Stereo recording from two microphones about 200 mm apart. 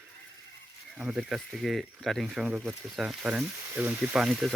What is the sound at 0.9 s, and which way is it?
Speech, 5° right (ahead or behind).